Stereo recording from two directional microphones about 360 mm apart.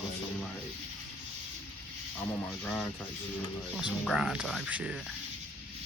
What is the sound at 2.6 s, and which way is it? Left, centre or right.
Speech, centre.